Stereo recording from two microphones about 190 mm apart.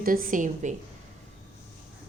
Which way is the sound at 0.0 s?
45° right (ahead or behind).